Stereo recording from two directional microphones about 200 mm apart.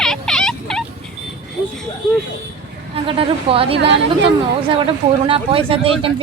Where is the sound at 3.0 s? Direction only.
25° right (ahead or behind).